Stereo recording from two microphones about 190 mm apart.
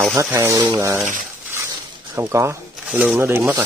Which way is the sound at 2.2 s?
15° right (ahead or behind).